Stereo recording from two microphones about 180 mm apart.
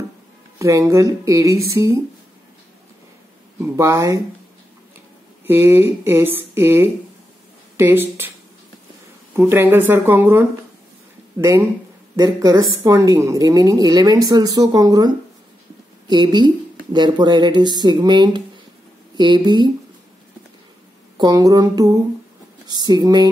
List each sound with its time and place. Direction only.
0.6 s speech: 15° right (ahead or behind)
3.6 s speech: 15° right (ahead or behind)
5.5 s speech: 10° right (ahead or behind)
9.3 s a woman's voice: 15° right (ahead or behind)
21.2 s a woman's voice: 20° right (ahead or behind)